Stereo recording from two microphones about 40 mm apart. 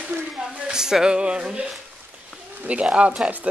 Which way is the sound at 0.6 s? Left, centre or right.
Centre.